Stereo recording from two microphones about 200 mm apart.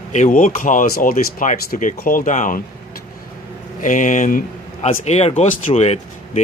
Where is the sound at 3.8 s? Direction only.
40° left (ahead or behind).